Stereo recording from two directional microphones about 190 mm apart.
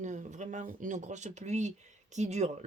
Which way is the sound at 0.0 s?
40° right (ahead or behind).